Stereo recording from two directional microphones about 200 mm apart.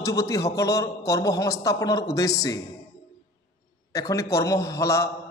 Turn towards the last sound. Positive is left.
turn(degrees=15)  # may be behind; listen again after turning